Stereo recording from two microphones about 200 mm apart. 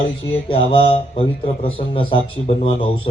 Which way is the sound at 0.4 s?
25° left (ahead or behind).